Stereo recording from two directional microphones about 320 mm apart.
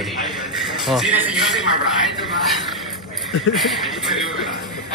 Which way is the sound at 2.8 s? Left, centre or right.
Centre.